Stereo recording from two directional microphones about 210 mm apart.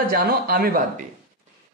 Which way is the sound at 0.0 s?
45° right (ahead or behind).